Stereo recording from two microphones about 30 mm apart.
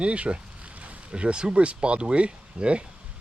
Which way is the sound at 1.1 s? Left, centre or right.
Right.